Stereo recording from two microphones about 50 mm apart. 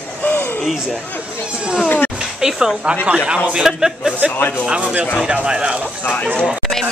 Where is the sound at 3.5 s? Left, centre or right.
Centre.